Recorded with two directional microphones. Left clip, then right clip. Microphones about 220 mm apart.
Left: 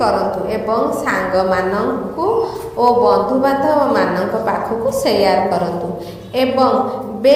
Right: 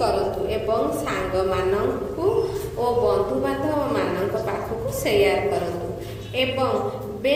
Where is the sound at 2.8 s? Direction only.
35° left (ahead or behind).